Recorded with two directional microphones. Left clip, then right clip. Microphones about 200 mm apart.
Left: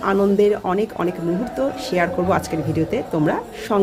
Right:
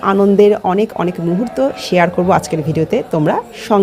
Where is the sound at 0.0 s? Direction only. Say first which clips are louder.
Right 6 dB; 30° right (ahead or behind).